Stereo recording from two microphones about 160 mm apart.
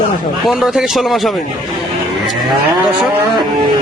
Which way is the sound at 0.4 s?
Centre (ahead or behind).